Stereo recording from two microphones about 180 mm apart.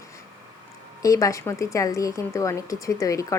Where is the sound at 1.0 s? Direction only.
20° left (ahead or behind).